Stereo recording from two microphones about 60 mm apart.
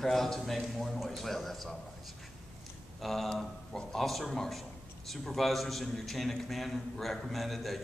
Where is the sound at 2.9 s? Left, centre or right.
Centre.